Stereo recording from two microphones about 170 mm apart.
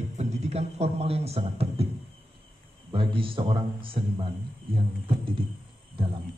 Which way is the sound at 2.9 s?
30° right (ahead or behind).